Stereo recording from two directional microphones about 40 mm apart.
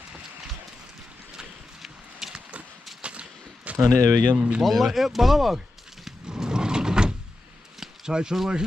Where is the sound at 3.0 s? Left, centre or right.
Right.